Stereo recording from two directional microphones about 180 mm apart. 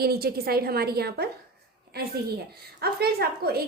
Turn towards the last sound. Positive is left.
turn(degrees=-60)  # may be behind; listen again after turning